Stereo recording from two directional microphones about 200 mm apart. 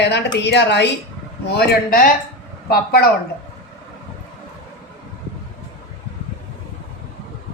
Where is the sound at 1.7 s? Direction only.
45° left (ahead or behind).